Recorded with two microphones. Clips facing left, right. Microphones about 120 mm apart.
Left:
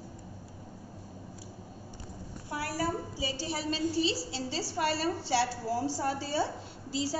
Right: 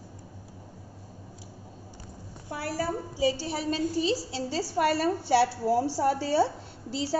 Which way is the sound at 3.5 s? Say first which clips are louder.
Right 3 dB; 50° right (ahead or behind).